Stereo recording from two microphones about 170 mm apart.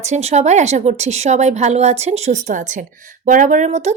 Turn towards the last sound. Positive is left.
turn(degrees=-45)  # may be behind; listen again after turning